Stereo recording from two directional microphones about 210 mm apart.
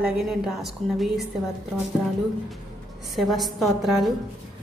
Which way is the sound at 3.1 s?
Centre (ahead or behind).